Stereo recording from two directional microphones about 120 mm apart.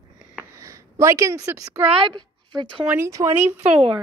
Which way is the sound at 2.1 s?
40° right (ahead or behind).